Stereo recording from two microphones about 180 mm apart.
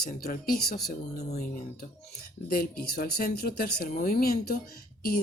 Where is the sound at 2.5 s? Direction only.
55° left (ahead or behind).